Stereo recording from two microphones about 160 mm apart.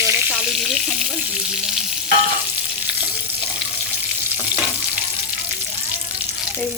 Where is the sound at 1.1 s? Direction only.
5° right (ahead or behind).